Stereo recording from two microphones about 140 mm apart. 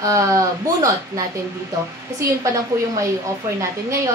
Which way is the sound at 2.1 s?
20° right (ahead or behind).